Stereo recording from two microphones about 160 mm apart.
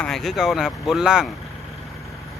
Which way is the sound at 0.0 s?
Centre (ahead or behind).